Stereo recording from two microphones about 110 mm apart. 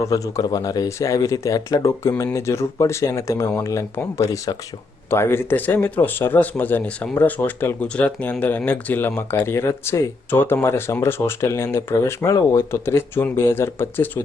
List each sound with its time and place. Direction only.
0.0 s speech: 30° left (ahead or behind)